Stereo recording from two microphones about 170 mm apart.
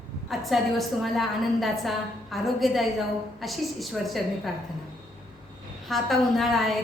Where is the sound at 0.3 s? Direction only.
Centre (ahead or behind).